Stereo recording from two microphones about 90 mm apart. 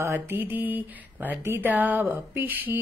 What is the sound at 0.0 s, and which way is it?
Mantra, 25° right (ahead or behind).